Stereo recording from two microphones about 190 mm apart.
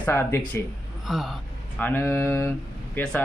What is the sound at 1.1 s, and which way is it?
Speech, centre (ahead or behind).